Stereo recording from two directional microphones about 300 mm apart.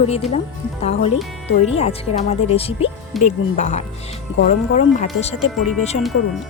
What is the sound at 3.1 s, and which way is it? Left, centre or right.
Speech, centre.